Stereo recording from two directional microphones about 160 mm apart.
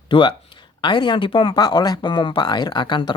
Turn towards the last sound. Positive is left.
turn(degrees=30)  # may be behind; listen again after turning